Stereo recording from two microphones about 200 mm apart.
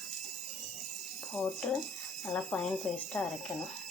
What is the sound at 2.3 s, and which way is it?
Speech, 5° left (ahead or behind).